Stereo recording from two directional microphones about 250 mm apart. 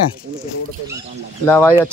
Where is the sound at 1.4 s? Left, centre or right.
Centre.